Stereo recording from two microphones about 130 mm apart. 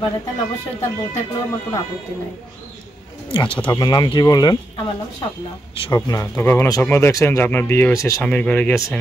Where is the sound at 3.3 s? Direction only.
40° left (ahead or behind).